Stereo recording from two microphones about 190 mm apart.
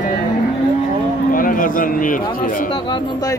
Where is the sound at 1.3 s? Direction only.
45° left (ahead or behind).